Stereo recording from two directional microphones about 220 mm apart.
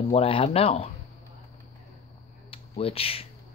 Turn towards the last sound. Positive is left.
turn(degrees=25)  # may be behind; listen again after turning